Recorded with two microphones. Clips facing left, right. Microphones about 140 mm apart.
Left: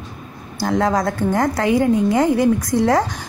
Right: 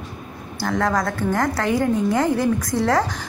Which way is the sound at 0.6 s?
20° left (ahead or behind).